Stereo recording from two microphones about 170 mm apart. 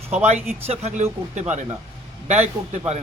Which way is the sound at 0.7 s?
40° right (ahead or behind).